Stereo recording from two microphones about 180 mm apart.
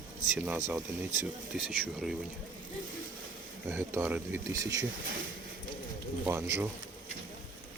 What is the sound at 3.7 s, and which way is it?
Speech, 15° right (ahead or behind).